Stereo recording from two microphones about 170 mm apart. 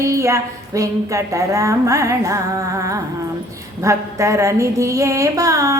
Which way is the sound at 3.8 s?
20° right (ahead or behind).